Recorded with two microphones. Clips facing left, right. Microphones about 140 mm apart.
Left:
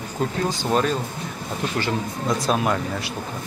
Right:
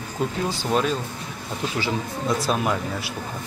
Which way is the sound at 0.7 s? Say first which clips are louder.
Left 1 dB; centre (ahead or behind).